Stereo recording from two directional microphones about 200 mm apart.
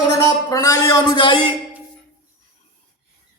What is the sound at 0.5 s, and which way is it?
A man's voice, 15° left (ahead or behind).